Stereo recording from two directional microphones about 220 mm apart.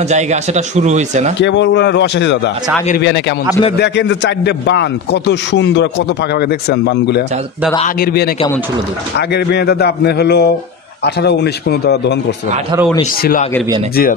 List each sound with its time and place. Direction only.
0.1 s speech: 30° right (ahead or behind)
1.4 s a man's voice: 55° left (ahead or behind)
9.3 s a man's voice: 50° left (ahead or behind)
13.2 s speech: 40° left (ahead or behind)